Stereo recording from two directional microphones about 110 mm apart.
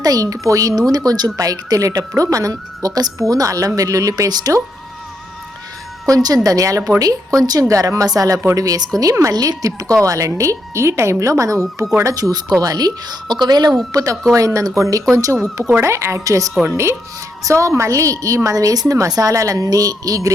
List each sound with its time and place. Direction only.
0.0 s a woman's voice: 35° right (ahead or behind)
6.1 s a woman's voice: 35° right (ahead or behind)